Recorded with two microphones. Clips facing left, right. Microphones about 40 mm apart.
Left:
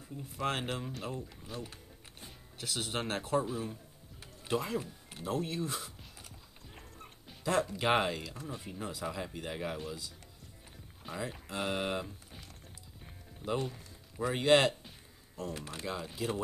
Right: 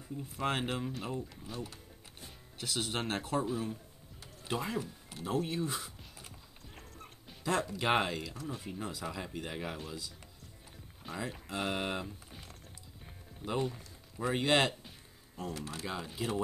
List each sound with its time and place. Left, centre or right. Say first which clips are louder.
0.2 s speech: right 1 dB; centre
6.7 s music: even; centre
8.5 s speech: left 1 dB; centre
13.0 s music: left 2 dB; centre
14.3 s speech: left 3 dB; centre
15.5 s speech: right 1 dB; centre
15.8 s speech: left 2 dB; centre